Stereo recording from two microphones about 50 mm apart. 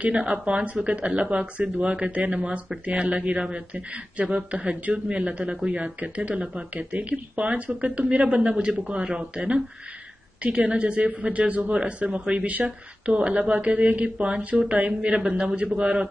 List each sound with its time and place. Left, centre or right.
0.0 s a man's voice: right
4.5 s a man's voice: right